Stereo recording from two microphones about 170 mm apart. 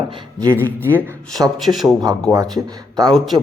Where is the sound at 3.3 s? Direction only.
25° right (ahead or behind).